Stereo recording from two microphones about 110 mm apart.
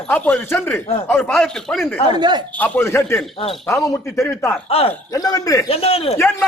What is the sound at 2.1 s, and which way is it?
Speech, 40° right (ahead or behind).